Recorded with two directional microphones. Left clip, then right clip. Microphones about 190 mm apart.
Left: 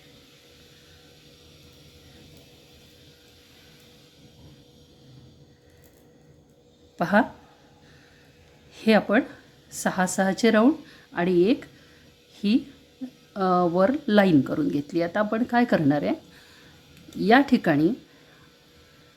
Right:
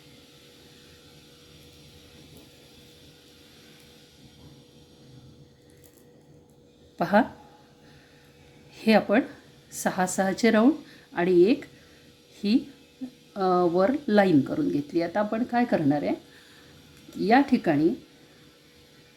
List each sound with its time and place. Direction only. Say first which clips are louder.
6.9 s speech: left 1 dB; 10° left (ahead or behind)
8.7 s speech: left 1 dB; 15° left (ahead or behind)
17.2 s speech: left 2 dB; 20° left (ahead or behind)